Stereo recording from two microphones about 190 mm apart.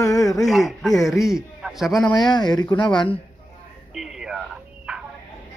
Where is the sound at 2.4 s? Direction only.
20° left (ahead or behind).